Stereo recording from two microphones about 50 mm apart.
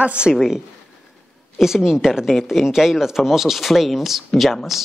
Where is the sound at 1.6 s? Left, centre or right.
Centre.